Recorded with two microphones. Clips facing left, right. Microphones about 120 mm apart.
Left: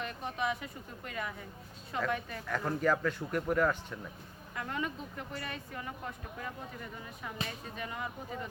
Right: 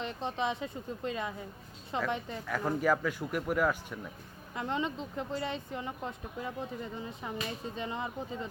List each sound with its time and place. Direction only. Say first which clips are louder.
0.0 s speech: right 2 dB; 25° right (ahead or behind)
2.5 s speech: right 1 dB; 5° right (ahead or behind)
4.5 s speech: right 4 dB; 25° right (ahead or behind)